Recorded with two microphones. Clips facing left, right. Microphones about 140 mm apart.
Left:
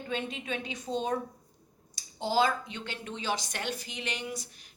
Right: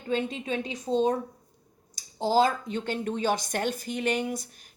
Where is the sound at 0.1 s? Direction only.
35° right (ahead or behind).